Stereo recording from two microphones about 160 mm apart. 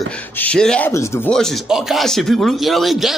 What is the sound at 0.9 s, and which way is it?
Speech, 20° left (ahead or behind).